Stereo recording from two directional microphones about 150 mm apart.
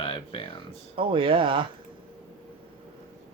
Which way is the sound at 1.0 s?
35° right (ahead or behind).